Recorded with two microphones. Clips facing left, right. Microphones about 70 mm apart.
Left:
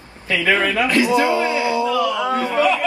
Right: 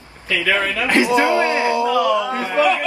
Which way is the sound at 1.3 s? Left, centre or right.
Right.